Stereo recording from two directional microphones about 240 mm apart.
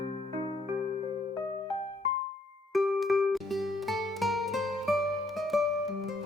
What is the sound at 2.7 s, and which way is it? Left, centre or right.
Music, centre.